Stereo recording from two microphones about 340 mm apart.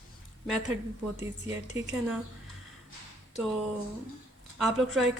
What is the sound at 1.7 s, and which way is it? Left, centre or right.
Speech, centre.